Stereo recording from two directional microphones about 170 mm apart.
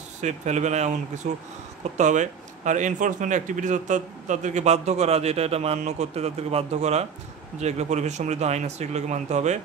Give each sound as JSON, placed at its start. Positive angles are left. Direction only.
{"t": 0.2, "sound": "speech", "side_deg": -45}